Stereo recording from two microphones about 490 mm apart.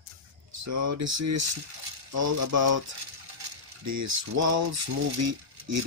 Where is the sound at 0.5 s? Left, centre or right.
Right.